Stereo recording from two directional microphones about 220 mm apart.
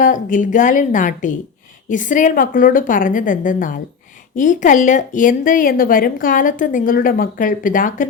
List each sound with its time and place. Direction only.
0.0 s a woman's voice: 35° left (ahead or behind)